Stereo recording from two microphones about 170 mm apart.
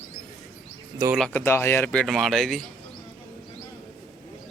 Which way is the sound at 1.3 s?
15° left (ahead or behind).